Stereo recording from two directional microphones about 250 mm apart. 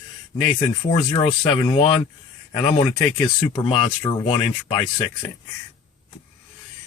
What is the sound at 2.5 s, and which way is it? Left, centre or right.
Speech, centre.